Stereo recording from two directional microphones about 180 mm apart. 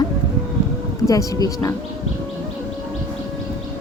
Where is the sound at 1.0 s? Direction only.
20° left (ahead or behind).